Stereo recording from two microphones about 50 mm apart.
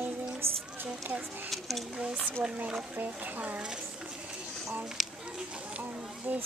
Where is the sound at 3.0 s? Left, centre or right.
Right.